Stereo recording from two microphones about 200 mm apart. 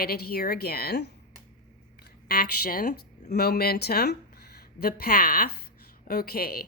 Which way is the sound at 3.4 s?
50° left (ahead or behind).